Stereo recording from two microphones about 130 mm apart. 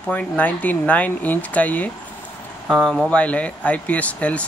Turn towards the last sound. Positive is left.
turn(degrees=10)  # may be behind; listen again after turning